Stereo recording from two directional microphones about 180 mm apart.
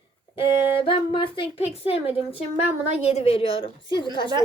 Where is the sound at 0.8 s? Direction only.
30° left (ahead or behind).